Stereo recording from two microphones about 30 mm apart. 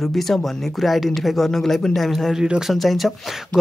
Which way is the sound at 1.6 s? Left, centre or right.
Centre.